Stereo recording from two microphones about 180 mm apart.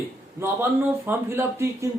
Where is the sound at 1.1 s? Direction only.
15° right (ahead or behind).